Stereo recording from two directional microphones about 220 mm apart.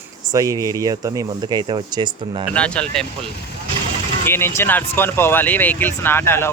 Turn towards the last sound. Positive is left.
turn(degrees=10)  # may be behind; listen again after turning